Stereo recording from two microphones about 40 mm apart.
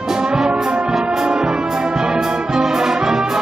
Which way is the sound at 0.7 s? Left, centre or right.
Right.